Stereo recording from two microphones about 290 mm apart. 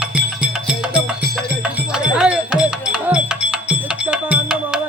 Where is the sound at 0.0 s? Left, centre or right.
Centre.